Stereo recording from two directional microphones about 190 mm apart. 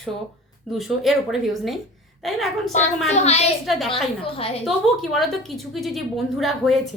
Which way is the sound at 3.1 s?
35° left (ahead or behind).